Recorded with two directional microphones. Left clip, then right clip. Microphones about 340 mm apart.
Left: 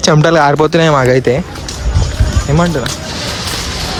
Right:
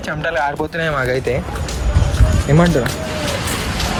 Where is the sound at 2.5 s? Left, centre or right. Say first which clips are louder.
Left 1 dB; centre.